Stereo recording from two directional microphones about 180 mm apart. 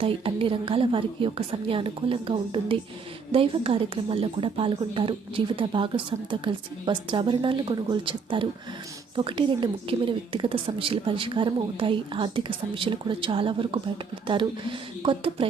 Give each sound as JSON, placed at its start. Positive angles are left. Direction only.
{"t": 0.0, "sound": "speech", "side_deg": -30}